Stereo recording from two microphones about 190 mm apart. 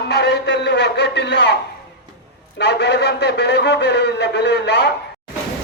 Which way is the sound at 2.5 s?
65° left (ahead or behind).